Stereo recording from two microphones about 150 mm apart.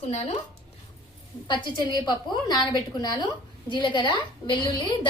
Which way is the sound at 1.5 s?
30° left (ahead or behind).